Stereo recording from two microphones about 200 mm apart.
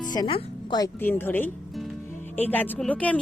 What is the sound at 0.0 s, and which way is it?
Speech, 20° left (ahead or behind).